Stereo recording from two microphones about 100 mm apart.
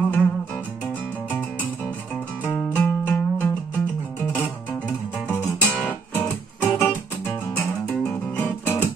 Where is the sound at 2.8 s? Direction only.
20° left (ahead or behind).